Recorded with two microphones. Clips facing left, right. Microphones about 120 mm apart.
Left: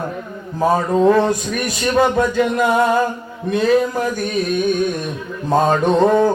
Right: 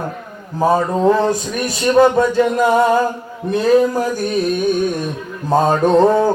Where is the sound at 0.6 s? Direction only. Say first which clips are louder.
Even; 30° right (ahead or behind).